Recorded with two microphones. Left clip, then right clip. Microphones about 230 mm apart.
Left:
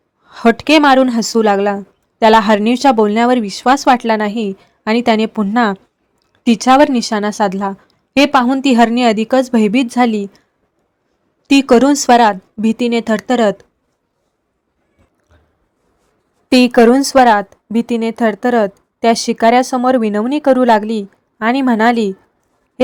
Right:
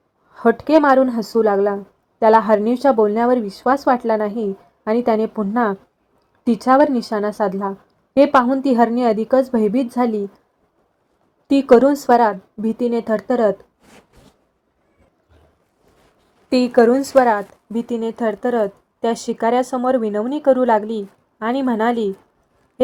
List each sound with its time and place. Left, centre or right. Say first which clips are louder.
0.5 s a woman's voice: left 4 dB; left
6.4 s a woman's voice: left 4 dB; left
11.4 s a woman's voice: left 2 dB; left
16.9 s a woman's voice: left 5 dB; left